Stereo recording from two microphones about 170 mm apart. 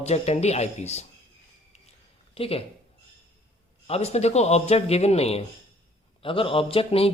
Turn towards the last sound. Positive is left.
turn(degrees=35)  # may be behind; listen again after turning